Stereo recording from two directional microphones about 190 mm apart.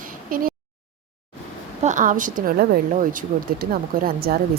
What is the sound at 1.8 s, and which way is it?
Speech, 40° right (ahead or behind).